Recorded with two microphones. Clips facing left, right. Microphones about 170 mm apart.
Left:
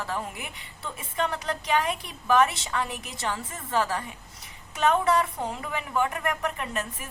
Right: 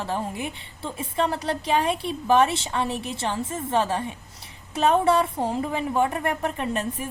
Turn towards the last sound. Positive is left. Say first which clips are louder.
# right 6 dB
turn(degrees=-30)  # may be behind; listen again after turning